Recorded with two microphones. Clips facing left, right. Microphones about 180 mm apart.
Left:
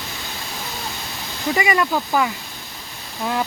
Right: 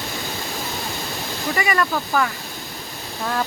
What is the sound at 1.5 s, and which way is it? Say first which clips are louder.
Speech: left 2 dB; 15° left (ahead or behind).